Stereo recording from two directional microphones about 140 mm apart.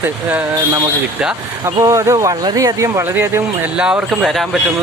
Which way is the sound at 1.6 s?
25° right (ahead or behind).